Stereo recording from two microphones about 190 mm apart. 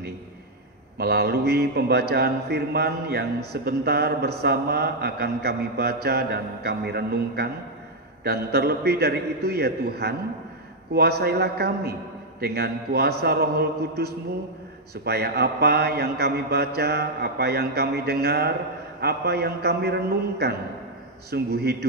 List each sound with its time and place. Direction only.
0.9 s a man's voice: 55° right (ahead or behind)